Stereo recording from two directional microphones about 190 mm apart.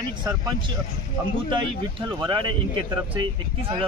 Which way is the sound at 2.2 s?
25° right (ahead or behind).